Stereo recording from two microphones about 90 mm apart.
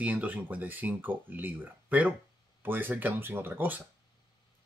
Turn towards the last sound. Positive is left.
turn(degrees=-25)  # may be behind; listen again after turning